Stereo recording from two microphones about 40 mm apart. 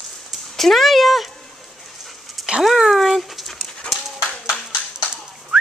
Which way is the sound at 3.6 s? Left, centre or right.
Left.